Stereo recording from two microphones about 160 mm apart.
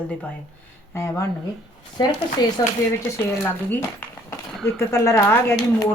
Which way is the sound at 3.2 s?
10° left (ahead or behind).